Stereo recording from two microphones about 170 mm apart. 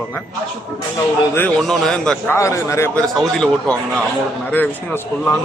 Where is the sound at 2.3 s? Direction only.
15° left (ahead or behind).